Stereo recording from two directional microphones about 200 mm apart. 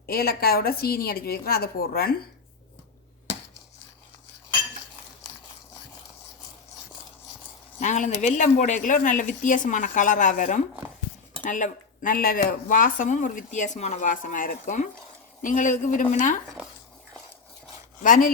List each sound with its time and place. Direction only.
0.0 s a woman's voice: 50° left (ahead or behind)
7.8 s speech: 35° left (ahead or behind)
18.0 s speech: 40° left (ahead or behind)